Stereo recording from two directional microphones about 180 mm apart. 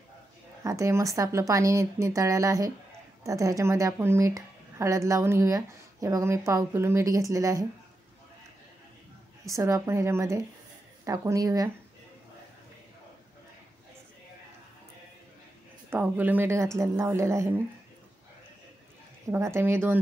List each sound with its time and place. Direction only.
0.7 s speech: 15° right (ahead or behind)
9.5 s speech: 15° right (ahead or behind)
15.9 s speech: 10° right (ahead or behind)
19.3 s speech: 15° right (ahead or behind)